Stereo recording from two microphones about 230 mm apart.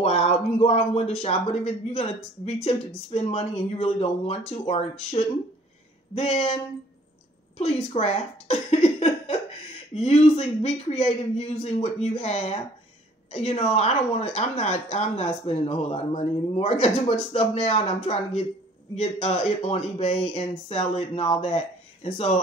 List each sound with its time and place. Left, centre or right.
0.0 s speech: left
6.1 s speech: left
7.5 s speech: left